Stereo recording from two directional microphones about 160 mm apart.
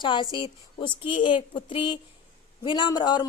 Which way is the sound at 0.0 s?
30° left (ahead or behind).